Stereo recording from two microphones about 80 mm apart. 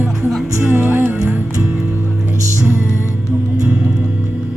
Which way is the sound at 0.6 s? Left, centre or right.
Right.